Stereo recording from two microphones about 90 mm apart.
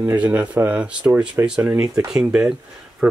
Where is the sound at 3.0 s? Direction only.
20° right (ahead or behind).